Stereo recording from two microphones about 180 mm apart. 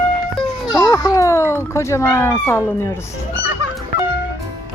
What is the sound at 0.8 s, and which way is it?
Speech, 20° left (ahead or behind).